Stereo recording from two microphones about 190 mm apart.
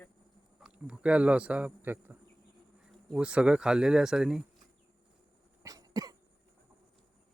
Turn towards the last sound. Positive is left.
turn(degrees=-20)  # may be behind; listen again after turning